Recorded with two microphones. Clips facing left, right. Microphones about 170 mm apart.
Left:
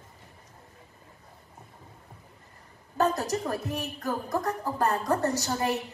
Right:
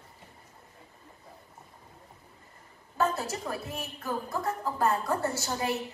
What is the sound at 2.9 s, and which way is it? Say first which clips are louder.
A woman's voice: left 3 dB; 40° left (ahead or behind).